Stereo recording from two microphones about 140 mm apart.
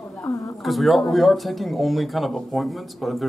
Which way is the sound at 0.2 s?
25° left (ahead or behind).